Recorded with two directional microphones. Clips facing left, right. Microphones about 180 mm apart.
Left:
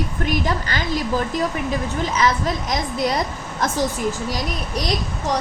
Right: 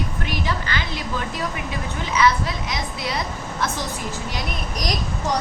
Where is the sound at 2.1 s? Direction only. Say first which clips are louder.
Right 2 dB; 40° left (ahead or behind).